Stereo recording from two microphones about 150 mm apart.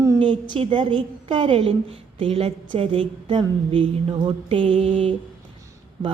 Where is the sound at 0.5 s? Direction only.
35° right (ahead or behind).